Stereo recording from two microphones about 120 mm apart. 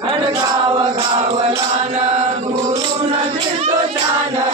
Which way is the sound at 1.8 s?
60° right (ahead or behind).